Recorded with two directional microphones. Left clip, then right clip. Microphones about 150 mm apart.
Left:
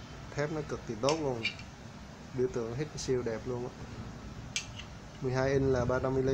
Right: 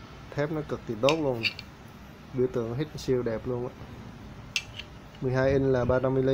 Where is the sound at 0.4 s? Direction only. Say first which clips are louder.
Right 4 dB; 50° right (ahead or behind).